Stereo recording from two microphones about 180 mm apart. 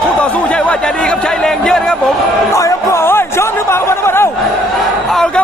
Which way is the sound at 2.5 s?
15° left (ahead or behind).